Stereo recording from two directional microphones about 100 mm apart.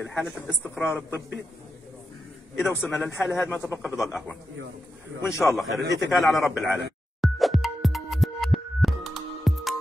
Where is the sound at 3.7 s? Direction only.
20° right (ahead or behind).